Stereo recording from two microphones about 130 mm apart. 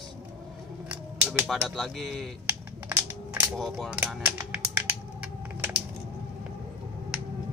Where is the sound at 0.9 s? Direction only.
5° right (ahead or behind).